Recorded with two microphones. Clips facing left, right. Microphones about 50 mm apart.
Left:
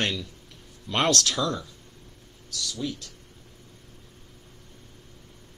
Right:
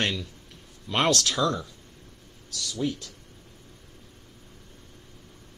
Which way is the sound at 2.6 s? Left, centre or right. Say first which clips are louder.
Right 3 dB; right.